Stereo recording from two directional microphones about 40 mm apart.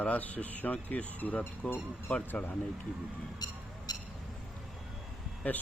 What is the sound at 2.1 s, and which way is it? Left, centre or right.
Speech, left.